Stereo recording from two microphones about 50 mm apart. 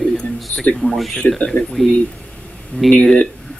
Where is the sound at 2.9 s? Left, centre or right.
Centre.